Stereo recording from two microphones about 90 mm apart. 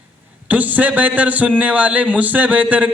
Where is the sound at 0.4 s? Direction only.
20° right (ahead or behind).